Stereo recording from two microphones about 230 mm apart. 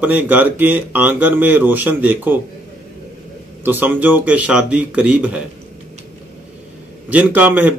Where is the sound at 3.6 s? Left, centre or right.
Centre.